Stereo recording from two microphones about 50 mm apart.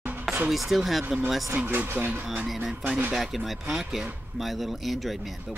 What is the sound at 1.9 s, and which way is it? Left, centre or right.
Speech, right.